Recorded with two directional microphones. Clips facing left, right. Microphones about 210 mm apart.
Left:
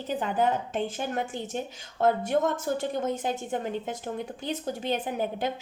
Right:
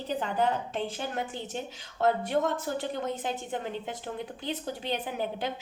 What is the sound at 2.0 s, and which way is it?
A woman's voice, 45° left (ahead or behind).